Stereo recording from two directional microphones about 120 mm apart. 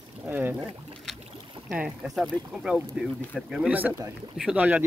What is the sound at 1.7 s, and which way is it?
Speech, 10° right (ahead or behind).